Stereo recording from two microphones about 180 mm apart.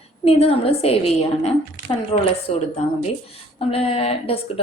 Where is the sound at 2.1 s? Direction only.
25° left (ahead or behind).